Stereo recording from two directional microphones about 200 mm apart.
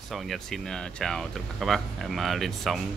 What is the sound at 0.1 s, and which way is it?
Speech, centre (ahead or behind).